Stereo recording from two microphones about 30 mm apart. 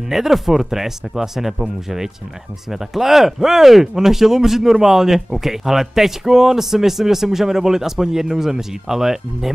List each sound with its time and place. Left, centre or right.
0.1 s speech: centre